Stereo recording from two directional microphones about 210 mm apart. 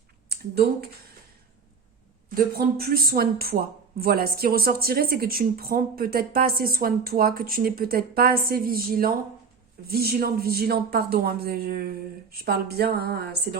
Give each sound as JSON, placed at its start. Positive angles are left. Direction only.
{"t": 0.3, "sound": "speech", "side_deg": -50}
{"t": 2.3, "sound": "speech", "side_deg": -45}